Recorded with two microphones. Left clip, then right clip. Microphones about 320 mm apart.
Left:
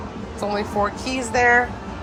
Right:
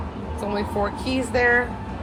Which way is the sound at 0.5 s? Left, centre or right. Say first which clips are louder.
Left 2 dB; centre.